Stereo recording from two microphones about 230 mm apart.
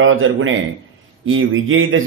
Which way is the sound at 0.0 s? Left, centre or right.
Right.